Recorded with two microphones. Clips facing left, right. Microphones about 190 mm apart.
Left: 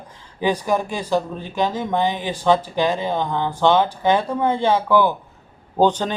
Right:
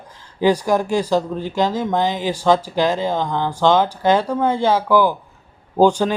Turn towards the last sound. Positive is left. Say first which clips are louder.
# right 3 dB
turn(degrees=-10)  # may be behind; listen again after turning